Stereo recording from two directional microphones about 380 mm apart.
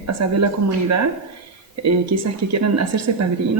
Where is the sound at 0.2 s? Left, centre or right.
Right.